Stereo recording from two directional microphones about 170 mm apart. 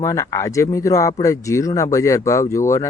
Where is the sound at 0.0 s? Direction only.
20° left (ahead or behind).